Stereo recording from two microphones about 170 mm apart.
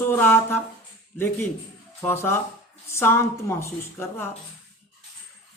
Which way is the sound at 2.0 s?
15° left (ahead or behind).